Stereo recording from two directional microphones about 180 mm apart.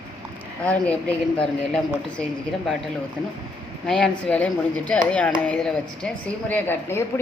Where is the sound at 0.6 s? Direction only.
10° left (ahead or behind).